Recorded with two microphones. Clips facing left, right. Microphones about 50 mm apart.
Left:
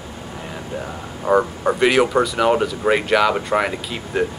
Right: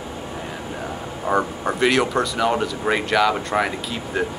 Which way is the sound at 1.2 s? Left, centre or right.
Centre.